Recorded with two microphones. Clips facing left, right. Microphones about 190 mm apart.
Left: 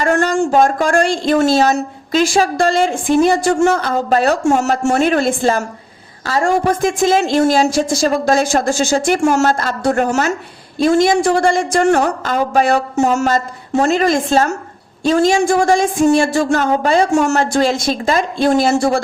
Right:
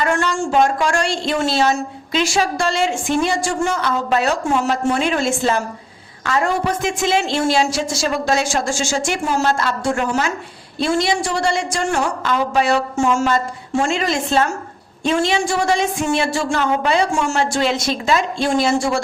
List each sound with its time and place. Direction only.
0.0 s a woman's voice: 45° left (ahead or behind)